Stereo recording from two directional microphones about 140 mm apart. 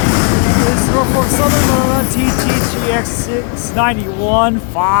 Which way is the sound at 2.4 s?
5° left (ahead or behind).